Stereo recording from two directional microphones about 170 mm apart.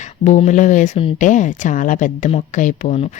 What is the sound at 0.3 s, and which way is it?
A woman's voice, 45° left (ahead or behind).